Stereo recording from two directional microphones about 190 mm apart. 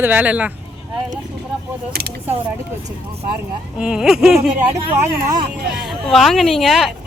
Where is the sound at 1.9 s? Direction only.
55° right (ahead or behind).